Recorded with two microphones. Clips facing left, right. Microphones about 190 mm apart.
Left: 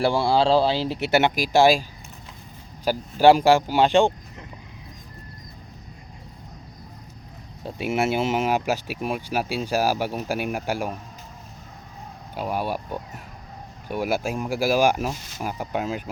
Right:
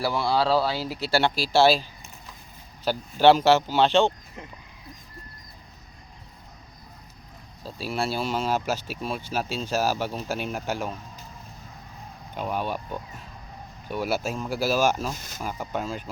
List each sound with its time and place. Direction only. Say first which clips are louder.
0.0 s speech: left 4 dB; 30° left (ahead or behind)
2.8 s speech: left 2 dB; 10° left (ahead or behind)
7.6 s speech: left 5 dB; 20° left (ahead or behind)
12.3 s speech: left 2 dB; 10° left (ahead or behind)
15.1 s speech: left 1 dB; 45° right (ahead or behind)
15.4 s speech: left 3 dB; 10° left (ahead or behind)